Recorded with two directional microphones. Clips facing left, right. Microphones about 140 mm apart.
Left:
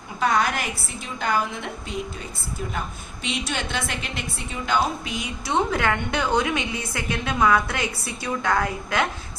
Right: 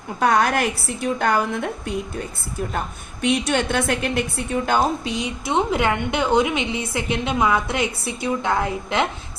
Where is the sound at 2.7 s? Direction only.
60° right (ahead or behind).